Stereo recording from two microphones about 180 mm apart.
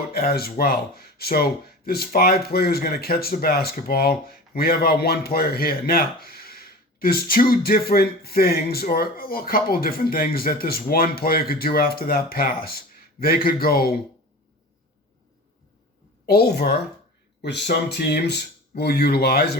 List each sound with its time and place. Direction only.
0.1 s speech: 55° left (ahead or behind)
16.2 s speech: 60° left (ahead or behind)